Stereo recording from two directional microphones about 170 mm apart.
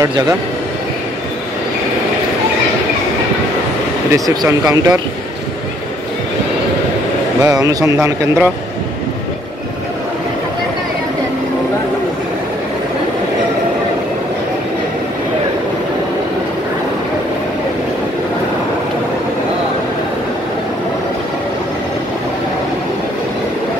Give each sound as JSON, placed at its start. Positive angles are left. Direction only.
{"t": 4.1, "sound": "speech", "side_deg": -20}
{"t": 7.4, "sound": "speech", "side_deg": -20}